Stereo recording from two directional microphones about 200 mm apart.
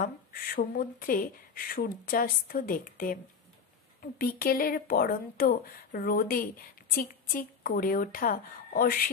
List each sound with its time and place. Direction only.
0.0 s speech: 45° left (ahead or behind)